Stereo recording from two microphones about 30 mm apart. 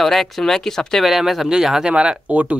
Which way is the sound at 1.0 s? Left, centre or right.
Centre.